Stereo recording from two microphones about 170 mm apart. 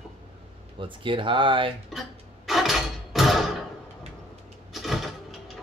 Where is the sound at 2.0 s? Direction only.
Centre (ahead or behind).